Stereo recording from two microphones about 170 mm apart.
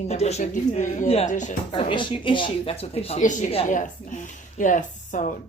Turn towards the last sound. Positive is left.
turn(degrees=50)  # may be behind; listen again after turning